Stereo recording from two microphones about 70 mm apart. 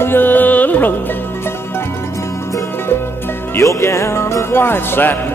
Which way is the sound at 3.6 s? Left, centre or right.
Left.